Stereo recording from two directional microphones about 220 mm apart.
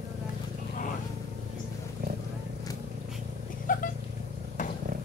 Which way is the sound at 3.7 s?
40° left (ahead or behind).